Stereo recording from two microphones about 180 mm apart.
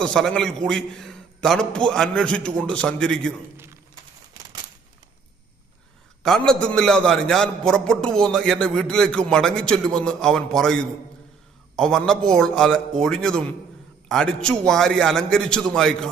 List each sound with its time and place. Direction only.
0.0 s a man's voice: 5° left (ahead or behind)
6.2 s a man's voice: 5° left (ahead or behind)